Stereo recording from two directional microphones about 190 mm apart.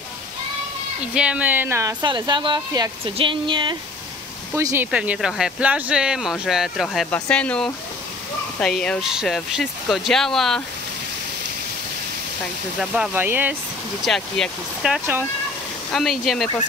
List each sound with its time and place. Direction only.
1.1 s speech: 5° right (ahead or behind); by 3.7 s 25° right (ahead or behind)
4.6 s speech: 15° right (ahead or behind)
12.7 s speech: 5° right (ahead or behind)
14.0 s speech: centre (ahead or behind)